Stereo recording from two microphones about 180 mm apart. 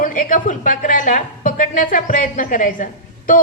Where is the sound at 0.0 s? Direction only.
50° left (ahead or behind).